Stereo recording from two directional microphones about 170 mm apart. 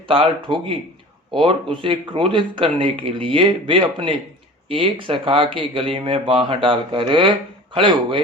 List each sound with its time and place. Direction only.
0.1 s speech: 30° right (ahead or behind)